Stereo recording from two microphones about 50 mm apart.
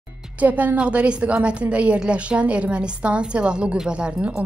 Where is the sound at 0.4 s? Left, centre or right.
Right.